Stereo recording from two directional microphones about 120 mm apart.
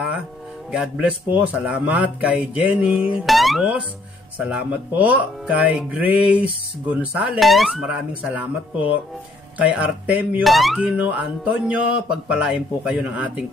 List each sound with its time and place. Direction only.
0.7 s music: 5° right (ahead or behind)
3.3 s speech: centre (ahead or behind)
4.4 s music: 10° right (ahead or behind)
7.3 s speech: centre (ahead or behind)
9.6 s music: 10° right (ahead or behind)
10.4 s music: centre (ahead or behind)